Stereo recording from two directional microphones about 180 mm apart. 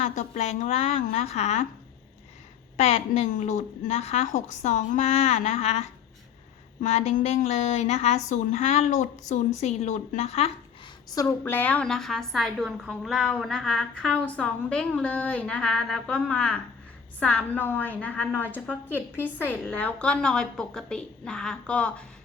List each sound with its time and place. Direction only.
0.0 s a woman's voice: 40° left (ahead or behind)
2.7 s a woman's voice: 35° left (ahead or behind)
6.8 s a woman's voice: 40° left (ahead or behind)
11.1 s a woman's voice: 20° left (ahead or behind)